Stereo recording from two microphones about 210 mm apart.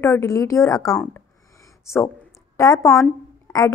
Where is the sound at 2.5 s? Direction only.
15° left (ahead or behind).